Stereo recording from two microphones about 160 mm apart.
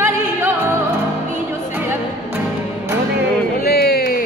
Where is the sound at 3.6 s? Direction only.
70° left (ahead or behind).